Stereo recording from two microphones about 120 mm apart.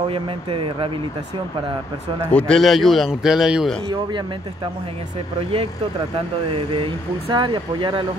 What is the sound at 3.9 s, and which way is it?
Speech, 40° right (ahead or behind).